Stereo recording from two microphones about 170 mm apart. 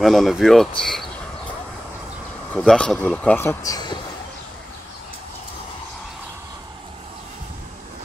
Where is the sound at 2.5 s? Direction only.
5° left (ahead or behind); by 4.0 s 25° left (ahead or behind).